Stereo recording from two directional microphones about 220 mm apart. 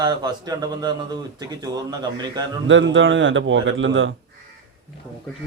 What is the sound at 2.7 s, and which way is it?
A man's voice, 60° right (ahead or behind).